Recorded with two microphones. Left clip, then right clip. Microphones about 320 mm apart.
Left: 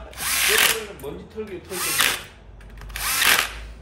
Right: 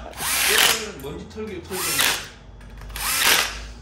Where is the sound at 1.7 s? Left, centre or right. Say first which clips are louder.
Even; centre.